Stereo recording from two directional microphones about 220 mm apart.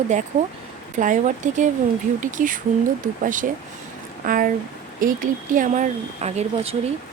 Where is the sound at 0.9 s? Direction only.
35° right (ahead or behind).